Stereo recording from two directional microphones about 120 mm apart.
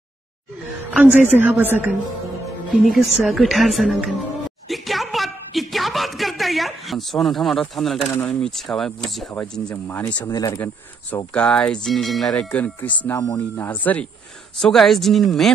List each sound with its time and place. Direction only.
0.8 s a woman's voice: 15° right (ahead or behind)
2.7 s a woman's voice: centre (ahead or behind)
4.6 s a sound: centre (ahead or behind)
7.7 s a woman's voice: centre (ahead or behind)
9.3 s speech: 15° left (ahead or behind)
10.2 s speech: 30° left (ahead or behind)
11.3 s speech: 10° left (ahead or behind)
13.2 s speech: 25° left (ahead or behind)
13.7 s speech: 15° left (ahead or behind)
14.6 s a woman's voice: 5° left (ahead or behind)